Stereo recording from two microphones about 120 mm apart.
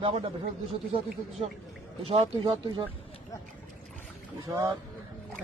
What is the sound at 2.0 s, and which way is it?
Speech, 50° right (ahead or behind).